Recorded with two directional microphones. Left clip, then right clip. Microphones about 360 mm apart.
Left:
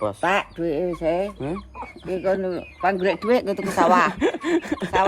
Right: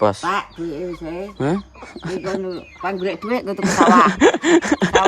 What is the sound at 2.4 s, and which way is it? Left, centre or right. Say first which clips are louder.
Speech: left 3 dB; centre.